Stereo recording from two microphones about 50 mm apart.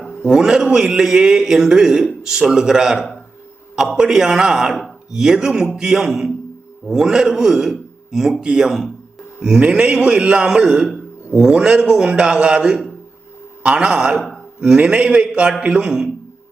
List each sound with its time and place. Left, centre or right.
0.2 s a man's voice: centre
9.4 s a man's voice: centre